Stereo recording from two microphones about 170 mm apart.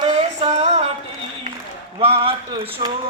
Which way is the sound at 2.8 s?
25° right (ahead or behind).